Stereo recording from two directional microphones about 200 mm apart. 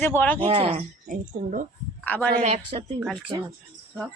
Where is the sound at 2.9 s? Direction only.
Centre (ahead or behind).